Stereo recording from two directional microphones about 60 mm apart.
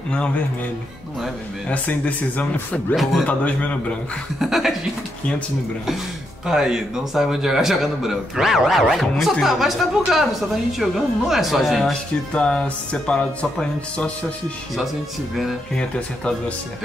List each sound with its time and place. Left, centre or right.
1.7 s speech: left
3.0 s a man's voice: centre
3.3 s speech: left
4.4 s a man's voice: centre
6.4 s a man's voice: centre
12.3 s speech: centre
15.7 s speech: centre